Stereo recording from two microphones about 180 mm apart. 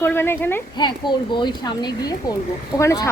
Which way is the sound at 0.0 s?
15° left (ahead or behind).